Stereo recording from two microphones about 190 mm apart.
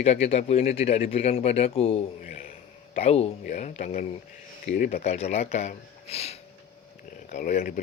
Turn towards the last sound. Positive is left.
turn(degrees=45)  # may be behind; listen again after turning